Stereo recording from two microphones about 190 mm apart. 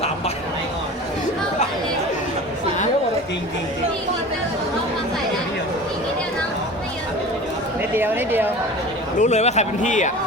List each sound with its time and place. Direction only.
7.9 s chatter: 10° right (ahead or behind)
9.1 s a man's voice: 35° left (ahead or behind)